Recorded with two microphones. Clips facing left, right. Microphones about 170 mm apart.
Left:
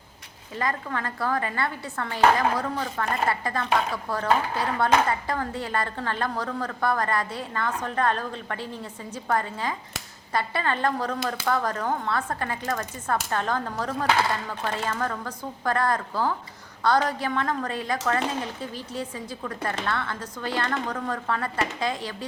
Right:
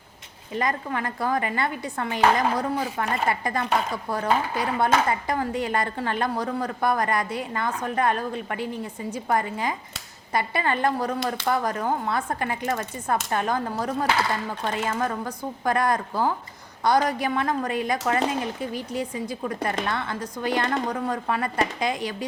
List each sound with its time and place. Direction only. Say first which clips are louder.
0.5 s speech: right 2 dB; 15° right (ahead or behind)